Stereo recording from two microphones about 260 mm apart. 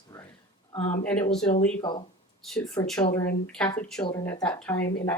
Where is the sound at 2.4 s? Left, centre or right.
Centre.